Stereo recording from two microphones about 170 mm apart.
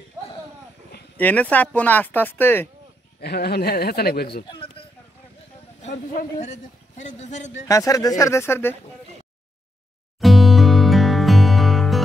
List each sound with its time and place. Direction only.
1.1 s speech: 10° left (ahead or behind)
3.2 s a man's voice: 70° left (ahead or behind)
5.8 s a man's voice: 45° left (ahead or behind)
7.6 s speech: 20° left (ahead or behind)
10.2 s music: centre (ahead or behind)